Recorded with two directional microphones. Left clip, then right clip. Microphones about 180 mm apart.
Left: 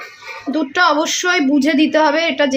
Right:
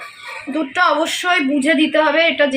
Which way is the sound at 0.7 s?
70° left (ahead or behind).